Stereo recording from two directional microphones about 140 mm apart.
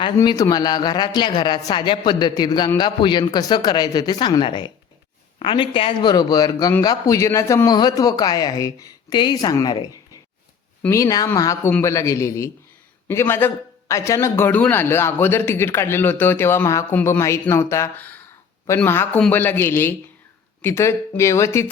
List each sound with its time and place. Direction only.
0.3 s a man's voice: 25° left (ahead or behind)